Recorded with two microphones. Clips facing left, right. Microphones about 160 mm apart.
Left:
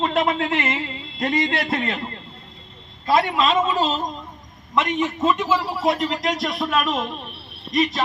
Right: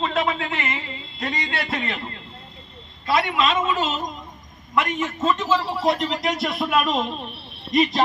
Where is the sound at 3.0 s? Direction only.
40° left (ahead or behind).